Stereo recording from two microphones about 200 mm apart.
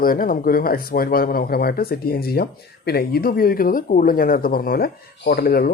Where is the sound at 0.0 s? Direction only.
45° left (ahead or behind).